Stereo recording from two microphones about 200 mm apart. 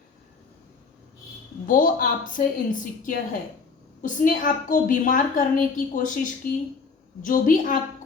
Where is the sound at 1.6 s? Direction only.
45° left (ahead or behind).